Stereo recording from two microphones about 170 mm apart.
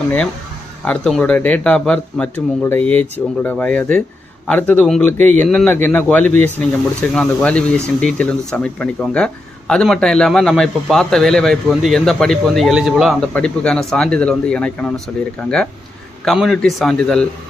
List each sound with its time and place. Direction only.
0.9 s speech: 5° left (ahead or behind)
16.2 s speech: centre (ahead or behind)